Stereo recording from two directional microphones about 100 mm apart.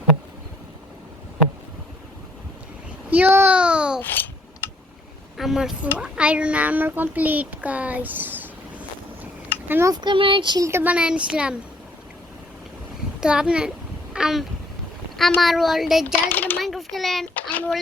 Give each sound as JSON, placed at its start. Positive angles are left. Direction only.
{"t": 3.1, "sound": "a child's voice", "side_deg": -20}
{"t": 3.6, "sound": "a child's voice", "side_deg": -10}
{"t": 4.0, "sound": "speech", "side_deg": 20}
{"t": 5.4, "sound": "a child's voice", "side_deg": -5}
{"t": 9.6, "sound": "speech", "side_deg": -20}
{"t": 9.9, "sound": "speech", "side_deg": -50}
{"t": 10.6, "sound": "a child's voice", "side_deg": -25}
{"t": 10.9, "sound": "a child's voice", "side_deg": -10}
{"t": 13.1, "sound": "a sound", "side_deg": -10}
{"t": 15.4, "sound": "speech", "side_deg": 0}
{"t": 16.1, "sound": "speech", "side_deg": 20}
{"t": 16.6, "sound": "a child's voice", "side_deg": 0}
{"t": 17.5, "sound": "speech", "side_deg": 15}